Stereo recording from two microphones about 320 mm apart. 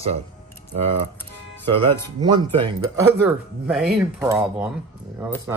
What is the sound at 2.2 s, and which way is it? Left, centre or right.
Speech, centre.